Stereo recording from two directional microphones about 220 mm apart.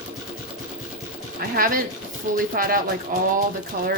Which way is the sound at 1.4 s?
45° right (ahead or behind).